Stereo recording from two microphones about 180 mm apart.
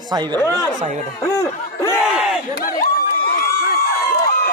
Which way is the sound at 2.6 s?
50° left (ahead or behind).